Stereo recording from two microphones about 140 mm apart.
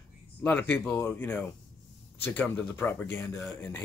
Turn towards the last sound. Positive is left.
turn(degrees=15)  # may be behind; listen again after turning